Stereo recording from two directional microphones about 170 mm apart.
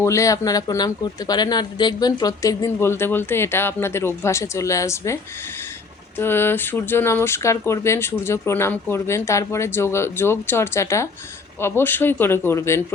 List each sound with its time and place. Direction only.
0.0 s speech: 20° left (ahead or behind)